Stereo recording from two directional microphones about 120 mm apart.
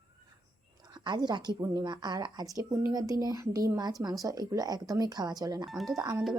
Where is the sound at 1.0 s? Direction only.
35° right (ahead or behind).